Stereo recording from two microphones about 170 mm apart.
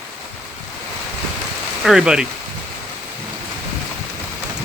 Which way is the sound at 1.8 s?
5° right (ahead or behind).